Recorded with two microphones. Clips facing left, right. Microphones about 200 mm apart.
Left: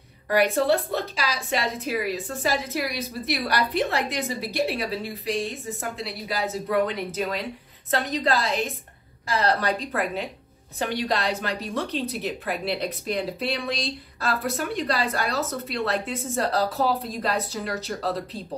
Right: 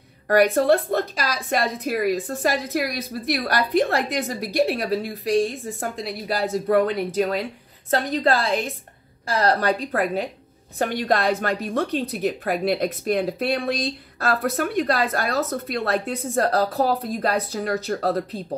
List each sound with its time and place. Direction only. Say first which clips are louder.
0.4 s a woman's voice: right 4 dB; 50° right (ahead or behind)
9.4 s a woman's voice: right 4 dB; 45° right (ahead or behind)